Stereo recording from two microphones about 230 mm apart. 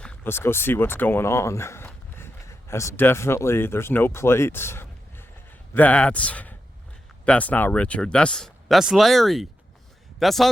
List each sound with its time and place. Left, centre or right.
0.0 s speech: centre